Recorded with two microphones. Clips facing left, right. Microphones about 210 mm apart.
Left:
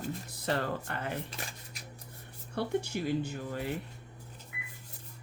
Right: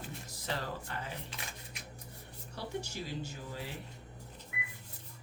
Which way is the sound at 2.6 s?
55° left (ahead or behind).